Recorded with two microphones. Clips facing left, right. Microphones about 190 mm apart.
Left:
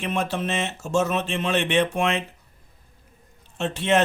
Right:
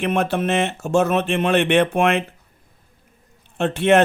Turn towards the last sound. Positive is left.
turn(degrees=-60)  # may be behind; listen again after turning